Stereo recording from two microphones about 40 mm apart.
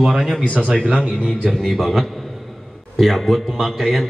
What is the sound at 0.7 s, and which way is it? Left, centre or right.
Speech, left.